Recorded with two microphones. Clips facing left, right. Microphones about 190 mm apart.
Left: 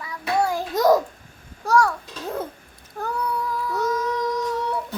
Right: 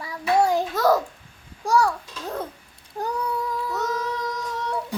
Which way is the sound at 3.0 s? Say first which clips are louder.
Even; 25° right (ahead or behind).